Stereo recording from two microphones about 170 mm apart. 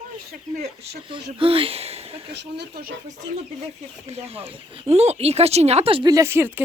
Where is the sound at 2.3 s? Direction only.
85° right.